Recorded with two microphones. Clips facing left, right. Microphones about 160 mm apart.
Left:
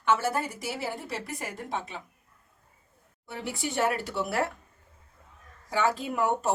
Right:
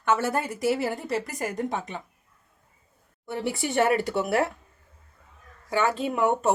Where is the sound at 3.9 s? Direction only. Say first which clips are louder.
Right 6 dB; 65° right (ahead or behind).